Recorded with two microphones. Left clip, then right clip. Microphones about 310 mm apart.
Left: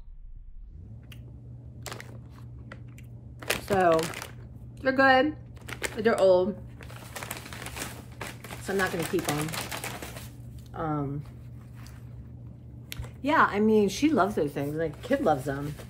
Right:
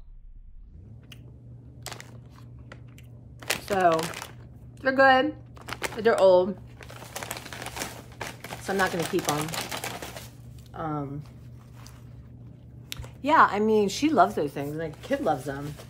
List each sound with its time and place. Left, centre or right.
3.3 s crumpling: centre
4.8 s speech: centre
6.8 s typewriter: right
8.6 s speech: centre
8.9 s speech: right
10.7 s speech: centre
12.9 s speech: centre